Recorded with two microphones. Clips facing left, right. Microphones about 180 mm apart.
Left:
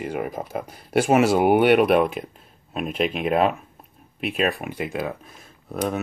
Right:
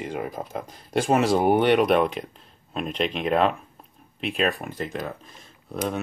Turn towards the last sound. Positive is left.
turn(degrees=5)  # may be behind; listen again after turning